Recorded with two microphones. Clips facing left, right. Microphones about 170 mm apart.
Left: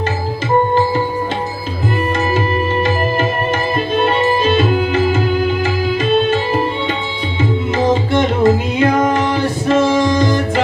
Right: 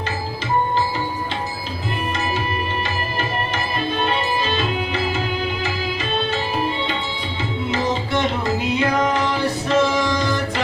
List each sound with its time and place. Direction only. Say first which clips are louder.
4.0 s music: left 9 dB; 50° left (ahead or behind)
8.4 s music: left 7 dB; 50° left (ahead or behind)